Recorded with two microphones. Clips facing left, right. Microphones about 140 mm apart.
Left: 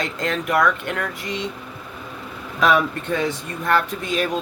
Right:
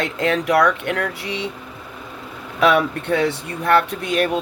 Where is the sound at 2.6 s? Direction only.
65° right (ahead or behind).